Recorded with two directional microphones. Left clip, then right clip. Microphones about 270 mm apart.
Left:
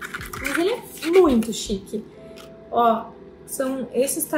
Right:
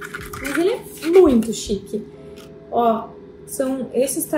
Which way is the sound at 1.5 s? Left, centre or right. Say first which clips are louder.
Right 3 dB; left.